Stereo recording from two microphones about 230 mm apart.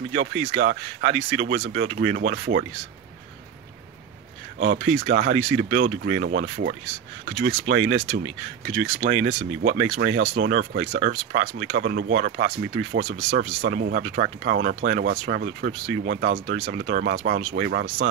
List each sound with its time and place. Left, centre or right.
0.1 s speech: right
0.5 s speech: right
1.6 s speech: right
4.6 s speech: right
5.8 s speech: right
9.2 s speech: right
12.3 s speech: right